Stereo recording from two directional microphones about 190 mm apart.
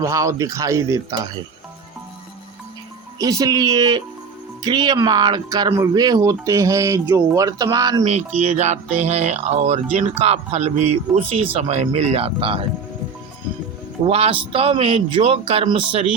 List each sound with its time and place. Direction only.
0.0 s speech: 15° right (ahead or behind)
3.2 s speech: 20° right (ahead or behind)
8.0 s speech: 35° right (ahead or behind)
14.1 s speech: 30° right (ahead or behind)